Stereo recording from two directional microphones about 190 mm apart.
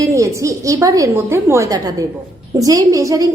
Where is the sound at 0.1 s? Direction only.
15° right (ahead or behind).